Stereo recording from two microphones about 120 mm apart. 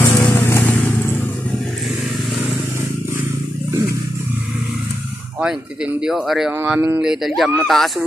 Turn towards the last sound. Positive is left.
turn(degrees=0)  # may be behind; listen again after turning